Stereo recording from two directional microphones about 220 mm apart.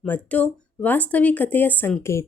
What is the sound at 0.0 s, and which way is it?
Speech, 5° left (ahead or behind).